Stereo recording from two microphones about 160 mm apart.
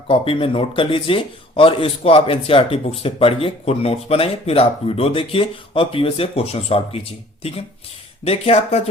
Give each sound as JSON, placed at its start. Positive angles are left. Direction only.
{"t": 0.1, "sound": "speech", "side_deg": 35}